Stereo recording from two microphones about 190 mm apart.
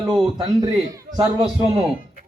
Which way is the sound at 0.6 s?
20° right (ahead or behind).